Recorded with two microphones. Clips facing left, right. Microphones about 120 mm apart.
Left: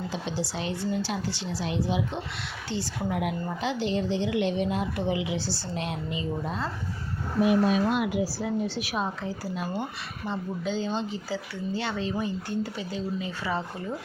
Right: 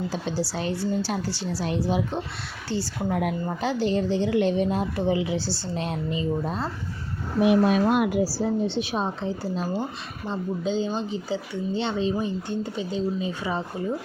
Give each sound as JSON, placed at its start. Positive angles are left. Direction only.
{"t": 0.1, "sound": "a woman's voice", "side_deg": -40}
{"t": 7.4, "sound": "a woman's voice", "side_deg": -65}